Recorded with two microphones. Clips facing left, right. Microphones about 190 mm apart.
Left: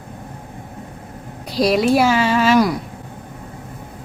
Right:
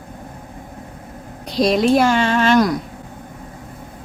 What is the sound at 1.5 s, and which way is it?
A woman's voice, 5° left (ahead or behind).